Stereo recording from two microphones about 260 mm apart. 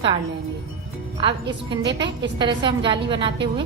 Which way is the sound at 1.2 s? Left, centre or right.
Centre.